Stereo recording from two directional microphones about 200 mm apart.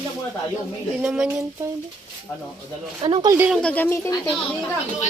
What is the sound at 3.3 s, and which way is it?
Speech, 10° right (ahead or behind).